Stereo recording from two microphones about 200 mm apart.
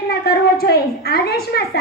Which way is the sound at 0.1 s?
50° left (ahead or behind).